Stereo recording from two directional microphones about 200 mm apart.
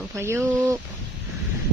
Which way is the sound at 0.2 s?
15° right (ahead or behind).